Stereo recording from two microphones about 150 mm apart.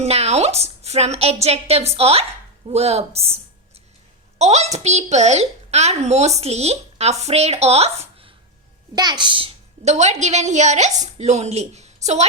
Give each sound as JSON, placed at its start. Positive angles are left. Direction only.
{"t": 0.0, "sound": "a woman's voice", "side_deg": -45}
{"t": 9.0, "sound": "a woman's voice", "side_deg": -30}